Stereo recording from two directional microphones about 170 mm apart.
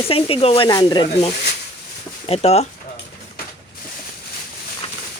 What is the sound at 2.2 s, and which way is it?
Speech, 35° left (ahead or behind).